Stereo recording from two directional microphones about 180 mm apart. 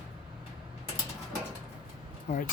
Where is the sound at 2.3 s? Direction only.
45° left (ahead or behind).